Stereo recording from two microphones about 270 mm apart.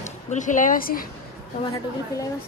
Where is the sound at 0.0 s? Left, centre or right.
Left.